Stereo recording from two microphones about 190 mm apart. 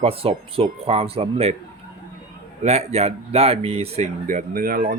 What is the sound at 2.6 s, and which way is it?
Speech, 35° right (ahead or behind).